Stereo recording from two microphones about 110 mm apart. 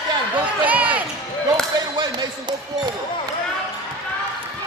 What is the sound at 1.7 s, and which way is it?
Speech, 40° right (ahead or behind).